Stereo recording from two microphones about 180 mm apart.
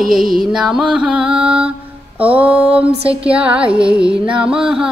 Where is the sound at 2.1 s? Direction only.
5° right (ahead or behind).